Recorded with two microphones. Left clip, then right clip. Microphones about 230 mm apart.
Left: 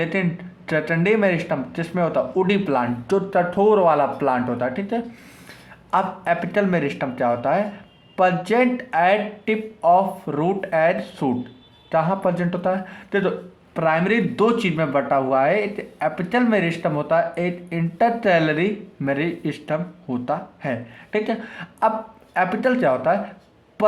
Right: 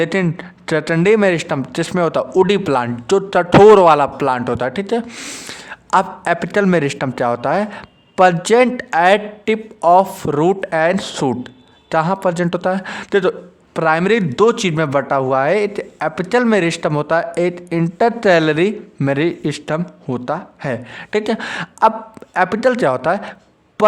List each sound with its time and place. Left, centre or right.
0.0 s speech: right